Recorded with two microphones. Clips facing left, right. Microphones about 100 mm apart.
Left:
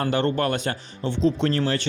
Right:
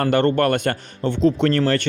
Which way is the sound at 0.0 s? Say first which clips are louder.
Right 5 dB; 55° right (ahead or behind).